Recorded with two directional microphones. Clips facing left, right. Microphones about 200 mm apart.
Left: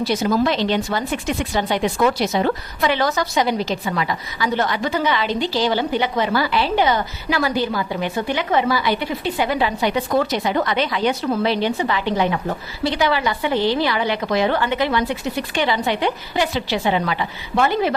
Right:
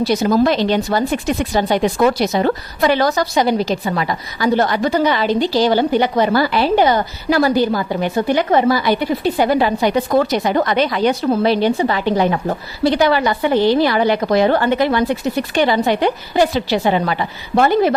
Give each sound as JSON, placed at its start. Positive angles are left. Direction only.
{"t": 0.0, "sound": "speech", "side_deg": -40}